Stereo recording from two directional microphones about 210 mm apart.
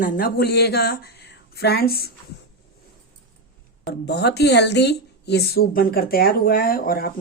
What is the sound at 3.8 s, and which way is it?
A woman's voice, 50° left (ahead or behind).